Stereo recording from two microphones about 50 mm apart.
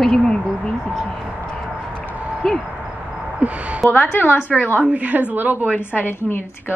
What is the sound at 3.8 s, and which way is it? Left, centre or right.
Speech, right.